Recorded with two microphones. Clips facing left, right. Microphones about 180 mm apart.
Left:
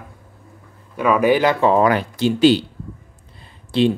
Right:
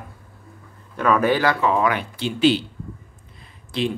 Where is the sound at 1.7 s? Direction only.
40° left (ahead or behind).